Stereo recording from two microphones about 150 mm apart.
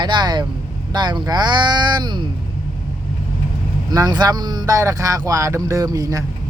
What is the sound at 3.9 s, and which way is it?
Speech, 25° right (ahead or behind).